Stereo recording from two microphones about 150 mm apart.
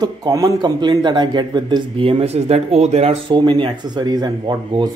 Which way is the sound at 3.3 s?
30° right (ahead or behind).